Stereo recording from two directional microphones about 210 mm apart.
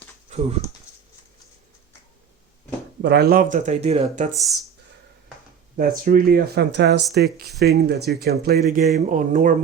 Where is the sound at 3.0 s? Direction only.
50° right (ahead or behind); by 4.2 s 30° right (ahead or behind).